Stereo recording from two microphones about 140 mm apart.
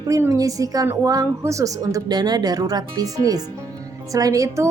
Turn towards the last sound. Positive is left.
turn(degrees=-20)  # may be behind; listen again after turning